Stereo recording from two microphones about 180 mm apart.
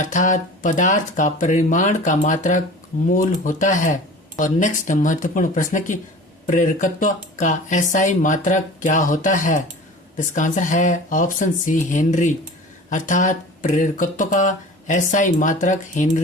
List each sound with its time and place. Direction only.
0.0 s speech: 45° left (ahead or behind)